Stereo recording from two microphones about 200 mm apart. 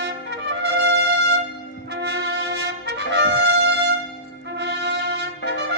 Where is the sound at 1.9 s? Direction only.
55° right (ahead or behind).